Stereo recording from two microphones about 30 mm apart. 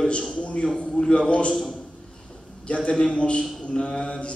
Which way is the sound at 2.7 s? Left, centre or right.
Left.